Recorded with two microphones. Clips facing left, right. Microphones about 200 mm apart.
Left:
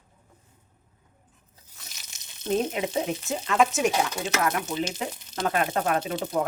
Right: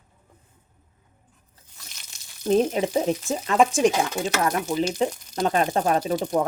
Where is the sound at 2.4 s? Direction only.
30° right (ahead or behind).